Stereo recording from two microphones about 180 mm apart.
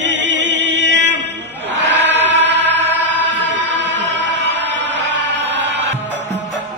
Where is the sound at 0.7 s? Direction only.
80° right.